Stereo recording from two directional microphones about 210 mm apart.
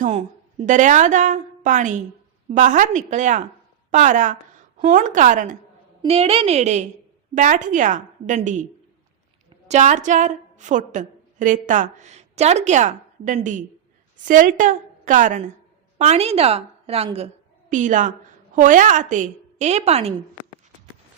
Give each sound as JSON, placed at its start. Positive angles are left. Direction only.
{"t": 0.0, "sound": "a woman's voice", "side_deg": -35}
{"t": 9.6, "sound": "a woman's voice", "side_deg": -35}